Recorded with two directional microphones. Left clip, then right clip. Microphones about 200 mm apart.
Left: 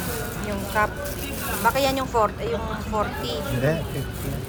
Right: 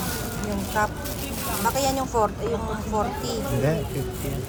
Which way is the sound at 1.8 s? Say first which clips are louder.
Left 2 dB; 15° right (ahead or behind).